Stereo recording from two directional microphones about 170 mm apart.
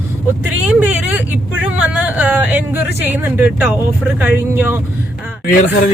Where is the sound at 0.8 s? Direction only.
10° right (ahead or behind).